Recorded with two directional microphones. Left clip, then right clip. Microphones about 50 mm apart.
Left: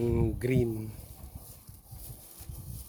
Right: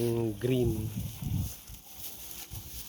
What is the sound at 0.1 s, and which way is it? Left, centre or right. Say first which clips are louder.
Speech: even; left.